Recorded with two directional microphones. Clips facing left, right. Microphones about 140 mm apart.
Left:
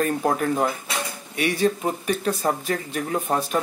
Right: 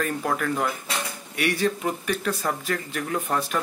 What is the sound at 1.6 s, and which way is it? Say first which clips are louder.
Speech: left 3 dB; 35° left (ahead or behind).